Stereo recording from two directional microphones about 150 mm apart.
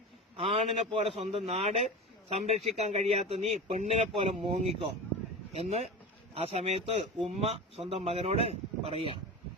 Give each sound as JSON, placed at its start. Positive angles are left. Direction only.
{"t": 0.3, "sound": "speech", "side_deg": -40}